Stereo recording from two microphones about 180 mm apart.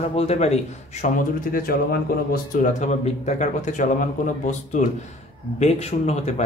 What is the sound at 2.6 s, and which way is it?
Speech, 40° left (ahead or behind).